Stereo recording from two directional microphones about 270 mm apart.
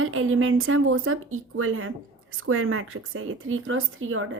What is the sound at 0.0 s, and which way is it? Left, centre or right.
A woman's voice, right.